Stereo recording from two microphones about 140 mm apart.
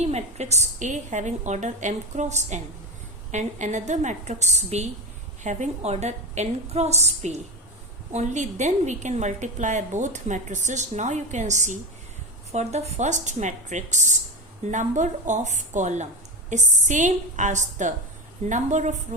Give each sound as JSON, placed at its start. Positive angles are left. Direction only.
{"t": 0.0, "sound": "a woman's voice", "side_deg": -50}